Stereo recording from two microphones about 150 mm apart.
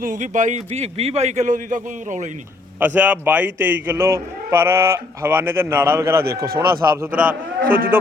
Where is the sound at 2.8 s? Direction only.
10° right (ahead or behind).